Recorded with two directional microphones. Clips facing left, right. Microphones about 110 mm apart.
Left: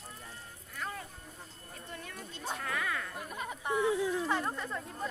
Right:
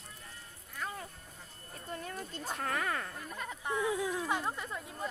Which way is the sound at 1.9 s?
40° right (ahead or behind).